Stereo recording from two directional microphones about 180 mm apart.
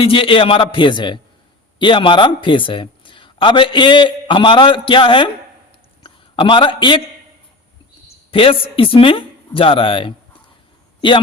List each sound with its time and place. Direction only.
0.0 s speech: 30° left (ahead or behind)
6.0 s a sound: 30° left (ahead or behind)
8.3 s speech: 30° left (ahead or behind)